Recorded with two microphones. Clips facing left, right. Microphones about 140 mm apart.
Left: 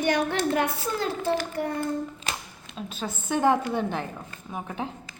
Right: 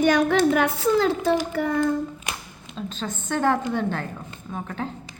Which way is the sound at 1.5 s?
90° right.